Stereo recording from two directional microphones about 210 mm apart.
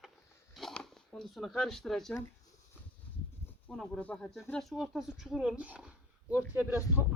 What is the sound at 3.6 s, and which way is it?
Speech, 5° left (ahead or behind).